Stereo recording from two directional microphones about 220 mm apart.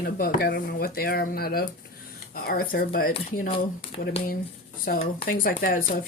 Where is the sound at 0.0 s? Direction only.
40° left (ahead or behind).